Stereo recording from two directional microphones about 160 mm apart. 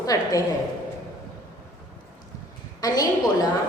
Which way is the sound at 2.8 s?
25° left (ahead or behind).